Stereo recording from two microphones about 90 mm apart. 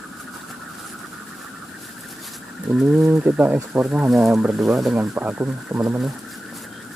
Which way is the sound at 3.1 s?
15° right (ahead or behind).